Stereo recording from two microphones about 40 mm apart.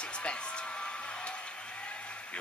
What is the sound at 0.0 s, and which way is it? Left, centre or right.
Music, left.